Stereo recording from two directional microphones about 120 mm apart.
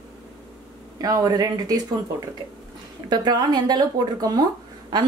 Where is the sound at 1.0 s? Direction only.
30° right (ahead or behind).